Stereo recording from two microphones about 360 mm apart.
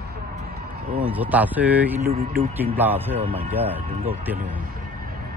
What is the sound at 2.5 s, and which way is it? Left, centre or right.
Speech, centre.